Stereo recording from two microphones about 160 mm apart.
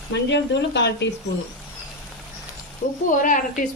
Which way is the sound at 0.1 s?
90° left.